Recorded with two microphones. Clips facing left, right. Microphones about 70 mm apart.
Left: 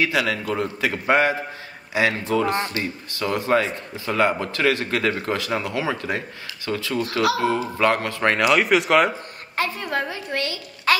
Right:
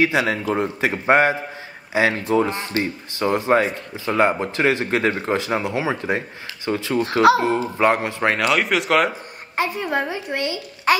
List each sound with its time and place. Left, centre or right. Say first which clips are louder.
0.0 s speech: right 3 dB; right
8.3 s speech: left 2 dB; centre
9.6 s speech: right 2 dB; centre